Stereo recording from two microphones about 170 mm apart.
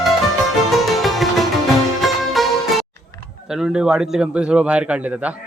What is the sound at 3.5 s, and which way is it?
A man's voice, 5° right (ahead or behind).